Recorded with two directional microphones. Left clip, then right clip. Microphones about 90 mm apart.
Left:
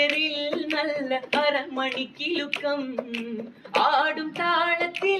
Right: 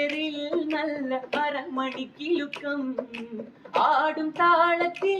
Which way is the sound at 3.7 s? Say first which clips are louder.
Left 1 dB; 35° right (ahead or behind).